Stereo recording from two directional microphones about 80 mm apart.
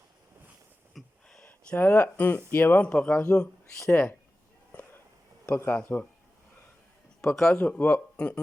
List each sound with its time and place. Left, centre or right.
0.9 s a sound: centre
1.5 s speech: centre
5.5 s speech: left
7.2 s speech: centre